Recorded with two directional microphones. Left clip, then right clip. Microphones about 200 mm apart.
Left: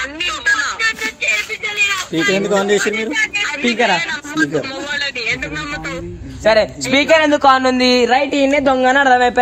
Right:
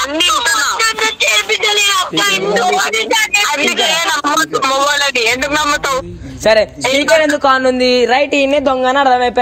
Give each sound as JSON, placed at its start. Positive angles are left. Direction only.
{"t": 0.2, "sound": "a sound", "side_deg": -60}
{"t": 1.2, "sound": "a sound", "side_deg": -5}
{"t": 2.8, "sound": "speech", "side_deg": -10}
{"t": 6.4, "sound": "a man's voice", "side_deg": -35}
{"t": 6.8, "sound": "speech", "side_deg": 0}
{"t": 8.1, "sound": "a woman's voice", "side_deg": -35}